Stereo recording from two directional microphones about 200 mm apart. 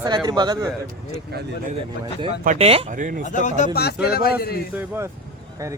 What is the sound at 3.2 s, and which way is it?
Speech, 40° left (ahead or behind).